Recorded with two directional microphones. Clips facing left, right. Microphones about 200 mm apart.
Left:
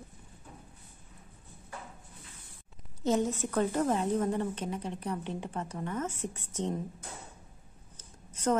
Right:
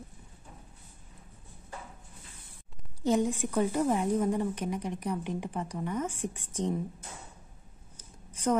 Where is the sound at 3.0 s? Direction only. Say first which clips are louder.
Right 2 dB; 15° right (ahead or behind).